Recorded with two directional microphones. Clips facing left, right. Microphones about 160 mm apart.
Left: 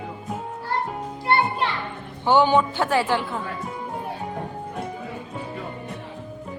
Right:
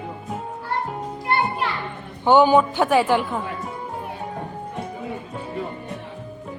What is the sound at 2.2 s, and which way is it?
A woman's voice, 15° right (ahead or behind).